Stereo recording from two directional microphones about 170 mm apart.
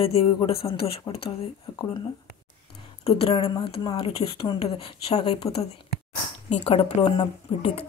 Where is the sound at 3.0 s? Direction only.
35° left (ahead or behind).